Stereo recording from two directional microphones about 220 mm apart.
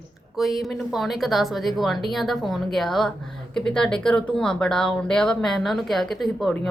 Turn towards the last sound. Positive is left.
turn(degrees=0)  # may be behind; listen again after turning